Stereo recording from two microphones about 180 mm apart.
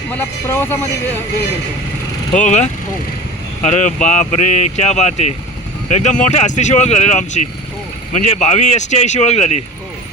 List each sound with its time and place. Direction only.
0.1 s speech: 10° left (ahead or behind)
2.3 s speech: 40° left (ahead or behind)